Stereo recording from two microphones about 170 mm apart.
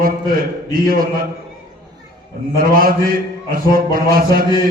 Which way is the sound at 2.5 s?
55° right (ahead or behind).